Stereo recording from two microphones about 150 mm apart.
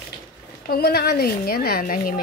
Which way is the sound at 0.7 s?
90° left.